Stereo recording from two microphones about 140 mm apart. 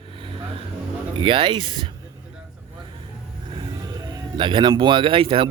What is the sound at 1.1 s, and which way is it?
Speech, 35° right (ahead or behind).